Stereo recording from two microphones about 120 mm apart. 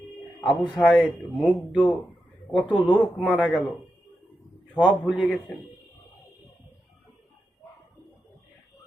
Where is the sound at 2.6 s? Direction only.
40° left (ahead or behind).